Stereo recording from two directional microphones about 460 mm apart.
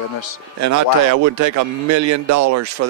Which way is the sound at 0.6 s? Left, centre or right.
Right.